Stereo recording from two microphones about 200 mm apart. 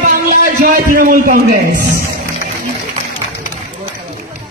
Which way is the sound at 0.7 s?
45° right (ahead or behind).